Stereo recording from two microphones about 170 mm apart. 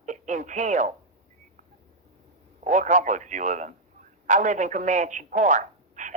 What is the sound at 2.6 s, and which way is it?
Speech, 45° right (ahead or behind).